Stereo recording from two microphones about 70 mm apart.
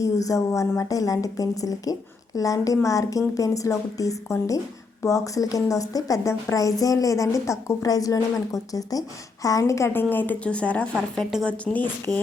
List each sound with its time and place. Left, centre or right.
0.0 s a woman's voice: left
9.9 s speech: left
10.4 s speech: centre